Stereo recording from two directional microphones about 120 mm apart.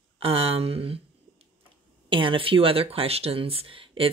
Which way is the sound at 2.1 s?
45° right (ahead or behind).